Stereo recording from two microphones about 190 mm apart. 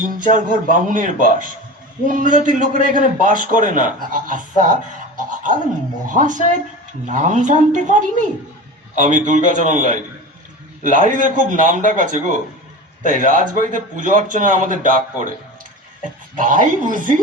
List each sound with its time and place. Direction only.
0.0 s a man's voice: 45° right (ahead or behind)
6.1 s a man's voice: 40° right (ahead or behind)
16.4 s a man's voice: 45° right (ahead or behind)